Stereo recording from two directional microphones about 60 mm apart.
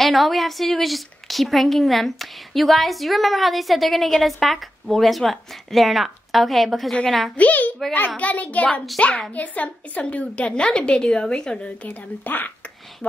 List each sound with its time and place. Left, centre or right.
0.0 s a woman's voice: centre
7.3 s a child's voice: left